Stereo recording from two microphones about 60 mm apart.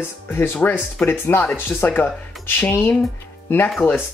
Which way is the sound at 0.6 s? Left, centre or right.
Left.